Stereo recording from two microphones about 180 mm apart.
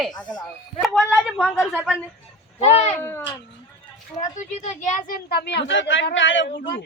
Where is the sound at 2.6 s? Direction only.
35° left (ahead or behind).